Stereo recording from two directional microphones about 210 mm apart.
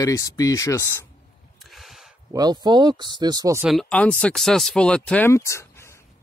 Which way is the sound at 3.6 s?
Centre (ahead or behind).